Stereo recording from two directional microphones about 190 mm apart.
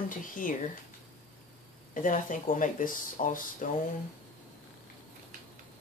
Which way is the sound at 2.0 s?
45° left (ahead or behind).